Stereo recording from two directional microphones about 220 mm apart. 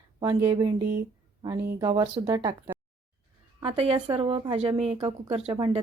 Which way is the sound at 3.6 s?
25° right (ahead or behind).